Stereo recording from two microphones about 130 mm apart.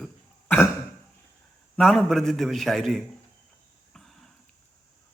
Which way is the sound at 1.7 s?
5° left (ahead or behind).